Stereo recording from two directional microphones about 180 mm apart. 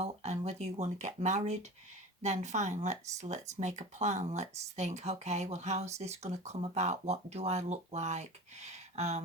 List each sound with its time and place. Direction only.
0.0 s speech: 35° right (ahead or behind)